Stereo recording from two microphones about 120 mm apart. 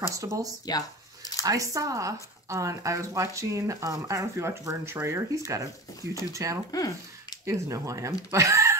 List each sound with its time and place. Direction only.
0.1 s speech: 25° right (ahead or behind)
0.7 s a sound: 30° left (ahead or behind)
1.4 s speech: 30° right (ahead or behind)
6.7 s speech: 30° left (ahead or behind)
7.4 s speech: 25° right (ahead or behind)